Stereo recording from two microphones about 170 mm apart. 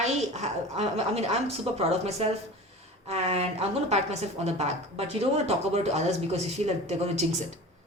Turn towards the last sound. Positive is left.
turn(degrees=-40)  # may be behind; listen again after turning